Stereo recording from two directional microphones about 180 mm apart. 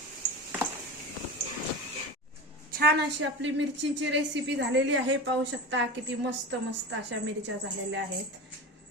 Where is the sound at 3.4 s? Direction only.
85° right.